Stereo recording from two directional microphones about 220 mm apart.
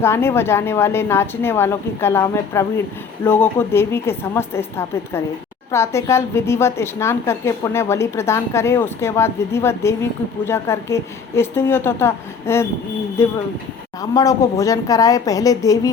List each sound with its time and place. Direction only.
0.0 s a woman's voice: 10° left (ahead or behind)